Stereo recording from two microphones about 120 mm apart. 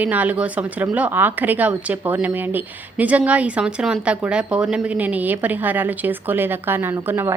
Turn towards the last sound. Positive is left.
turn(degrees=-20)  # may be behind; listen again after turning